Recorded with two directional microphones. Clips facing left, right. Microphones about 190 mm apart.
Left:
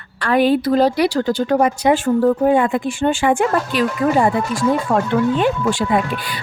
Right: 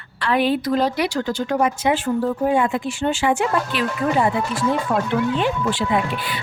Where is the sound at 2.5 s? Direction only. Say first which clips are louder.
Left 4 dB; 55° left (ahead or behind).